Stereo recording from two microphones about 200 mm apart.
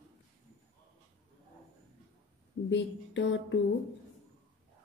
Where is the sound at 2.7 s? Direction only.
65° left (ahead or behind).